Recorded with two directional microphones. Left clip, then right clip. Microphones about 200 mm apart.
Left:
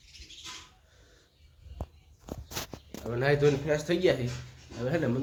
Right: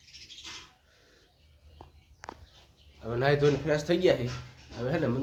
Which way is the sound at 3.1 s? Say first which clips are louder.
Even; 5° right (ahead or behind).